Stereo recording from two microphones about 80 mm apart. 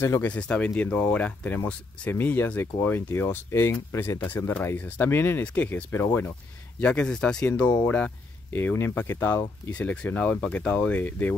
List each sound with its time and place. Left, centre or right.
0.2 s speech: centre
6.8 s speech: centre
8.5 s speech: left